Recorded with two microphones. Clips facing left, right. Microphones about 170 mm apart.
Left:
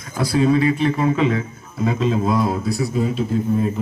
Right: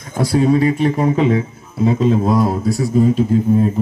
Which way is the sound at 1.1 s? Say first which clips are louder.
Right 4 dB; 30° right (ahead or behind).